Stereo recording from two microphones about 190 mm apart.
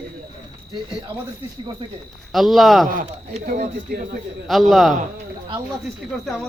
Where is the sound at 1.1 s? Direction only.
25° right (ahead or behind).